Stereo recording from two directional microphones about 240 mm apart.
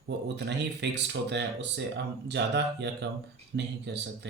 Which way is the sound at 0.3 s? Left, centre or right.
Right.